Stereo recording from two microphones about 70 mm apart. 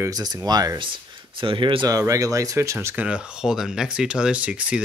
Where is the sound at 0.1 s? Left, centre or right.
Right.